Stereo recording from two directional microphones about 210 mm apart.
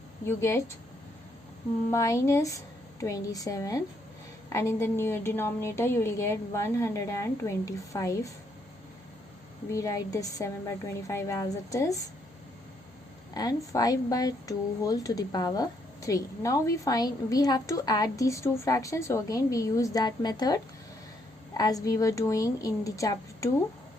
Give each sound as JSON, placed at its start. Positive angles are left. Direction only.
{"t": 0.3, "sound": "speech", "side_deg": 15}
{"t": 1.9, "sound": "speech", "side_deg": 15}
{"t": 9.6, "sound": "speech", "side_deg": 15}
{"t": 13.3, "sound": "speech", "side_deg": 20}
{"t": 21.6, "sound": "speech", "side_deg": 20}